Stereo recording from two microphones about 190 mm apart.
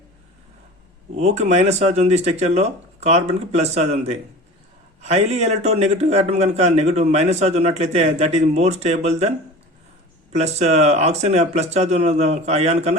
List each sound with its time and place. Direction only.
1.1 s a man's voice: 35° right (ahead or behind)
10.3 s a man's voice: 35° right (ahead or behind)